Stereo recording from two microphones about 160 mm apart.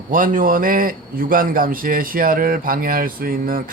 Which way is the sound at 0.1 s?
60° right (ahead or behind).